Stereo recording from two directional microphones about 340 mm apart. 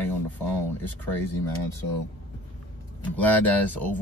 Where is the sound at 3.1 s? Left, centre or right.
Centre.